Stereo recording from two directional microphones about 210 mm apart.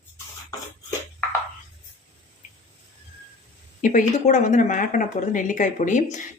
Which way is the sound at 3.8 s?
35° left (ahead or behind).